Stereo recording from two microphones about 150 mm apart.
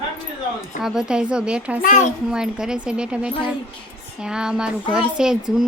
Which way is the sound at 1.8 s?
50° left (ahead or behind).